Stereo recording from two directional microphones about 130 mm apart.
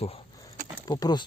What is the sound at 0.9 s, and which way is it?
Speech, 30° left (ahead or behind).